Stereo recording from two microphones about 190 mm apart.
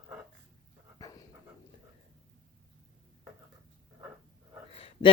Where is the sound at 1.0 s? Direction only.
20° left (ahead or behind).